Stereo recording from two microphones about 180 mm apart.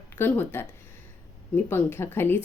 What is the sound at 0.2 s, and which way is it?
Speech, 10° left (ahead or behind).